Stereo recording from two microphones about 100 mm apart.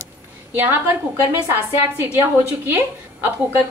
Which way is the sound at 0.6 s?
20° right (ahead or behind).